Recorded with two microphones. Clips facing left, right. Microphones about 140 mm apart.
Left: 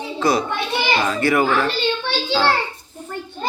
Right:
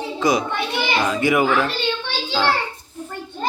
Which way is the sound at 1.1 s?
10° right (ahead or behind).